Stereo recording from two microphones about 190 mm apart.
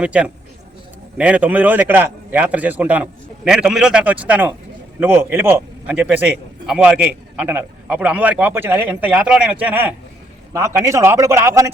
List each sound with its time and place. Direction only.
0.0 s a man's voice: 5° right (ahead or behind)